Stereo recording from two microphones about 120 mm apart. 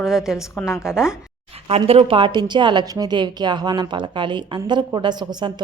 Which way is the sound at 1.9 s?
55° right (ahead or behind).